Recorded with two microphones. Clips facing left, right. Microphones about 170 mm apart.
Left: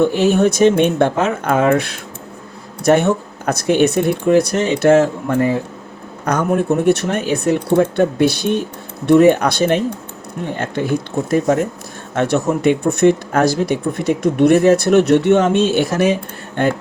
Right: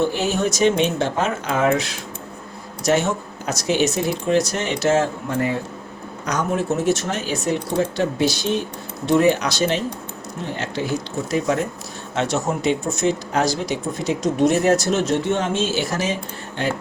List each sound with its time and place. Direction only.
0.0 s speech: 55° left (ahead or behind)